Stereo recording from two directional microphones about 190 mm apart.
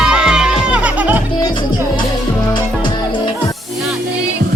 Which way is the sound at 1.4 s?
20° left (ahead or behind).